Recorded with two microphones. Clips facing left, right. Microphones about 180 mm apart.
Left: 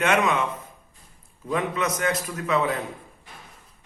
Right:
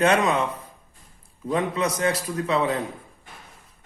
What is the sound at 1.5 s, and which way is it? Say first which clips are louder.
A man's voice: right 2 dB; 30° right (ahead or behind).